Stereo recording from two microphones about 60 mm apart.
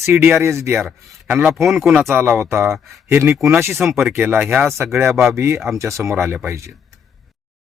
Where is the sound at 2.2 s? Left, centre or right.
Right.